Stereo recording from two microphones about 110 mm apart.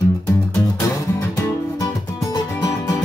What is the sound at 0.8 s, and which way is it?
Music, 30° left (ahead or behind).